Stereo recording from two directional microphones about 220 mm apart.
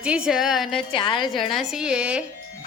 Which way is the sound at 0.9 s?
20° left (ahead or behind).